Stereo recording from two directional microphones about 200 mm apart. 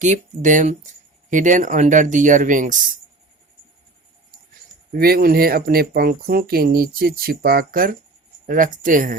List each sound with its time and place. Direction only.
0.0 s speech: 40° right (ahead or behind)
4.9 s speech: 50° right (ahead or behind)